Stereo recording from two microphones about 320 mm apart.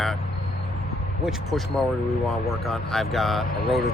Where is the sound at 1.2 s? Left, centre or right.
Centre.